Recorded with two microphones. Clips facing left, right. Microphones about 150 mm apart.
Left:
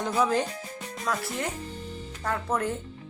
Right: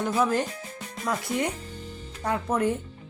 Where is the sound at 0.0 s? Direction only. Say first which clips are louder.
Right 1 dB; 5° right (ahead or behind).